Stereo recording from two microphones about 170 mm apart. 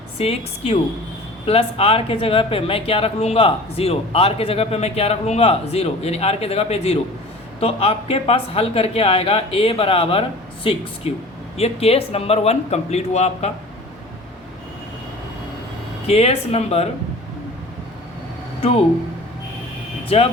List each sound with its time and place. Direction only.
0.2 s speech: 35° left (ahead or behind)
16.0 s speech: 35° left (ahead or behind)
18.6 s speech: 35° left (ahead or behind)
20.1 s speech: 35° left (ahead or behind)